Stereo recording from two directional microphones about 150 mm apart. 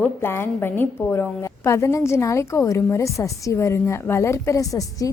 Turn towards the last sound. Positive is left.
turn(degrees=20)  # may be behind; listen again after turning